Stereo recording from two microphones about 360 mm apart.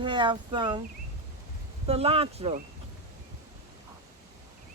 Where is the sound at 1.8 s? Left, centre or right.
Centre.